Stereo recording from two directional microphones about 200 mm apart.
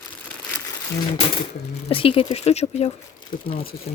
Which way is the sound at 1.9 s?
25° left (ahead or behind).